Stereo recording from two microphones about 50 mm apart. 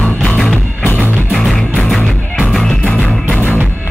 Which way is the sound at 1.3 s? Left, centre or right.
Centre.